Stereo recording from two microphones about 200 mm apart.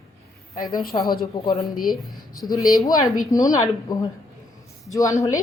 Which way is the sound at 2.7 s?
15° left (ahead or behind).